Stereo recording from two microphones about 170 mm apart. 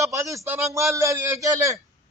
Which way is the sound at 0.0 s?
20° right (ahead or behind).